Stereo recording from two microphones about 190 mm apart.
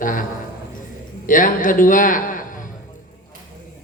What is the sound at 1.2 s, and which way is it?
A man's voice, 45° left (ahead or behind).